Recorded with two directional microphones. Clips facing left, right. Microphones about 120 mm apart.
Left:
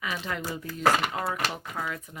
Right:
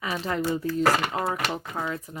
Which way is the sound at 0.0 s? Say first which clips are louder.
Right 5 dB; 35° right (ahead or behind).